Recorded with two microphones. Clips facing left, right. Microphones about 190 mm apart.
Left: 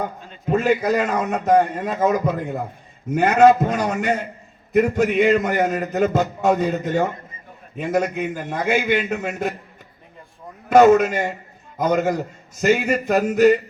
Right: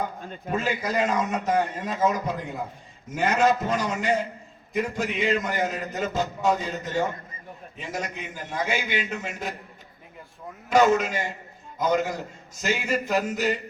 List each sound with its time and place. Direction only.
0.5 s a man's voice: 60° left (ahead or behind)
10.7 s a man's voice: 60° left (ahead or behind)